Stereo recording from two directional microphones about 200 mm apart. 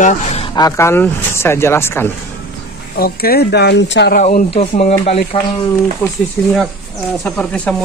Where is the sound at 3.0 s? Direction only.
50° left (ahead or behind).